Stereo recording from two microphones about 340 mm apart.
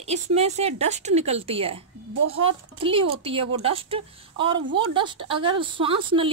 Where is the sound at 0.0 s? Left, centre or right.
Centre.